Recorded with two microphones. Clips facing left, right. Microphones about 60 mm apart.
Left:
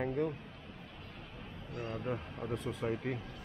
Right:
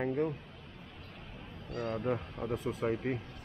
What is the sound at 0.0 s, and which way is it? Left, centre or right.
Speech, centre.